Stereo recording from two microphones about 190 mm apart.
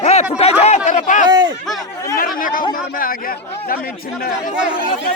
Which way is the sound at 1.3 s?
20° right (ahead or behind).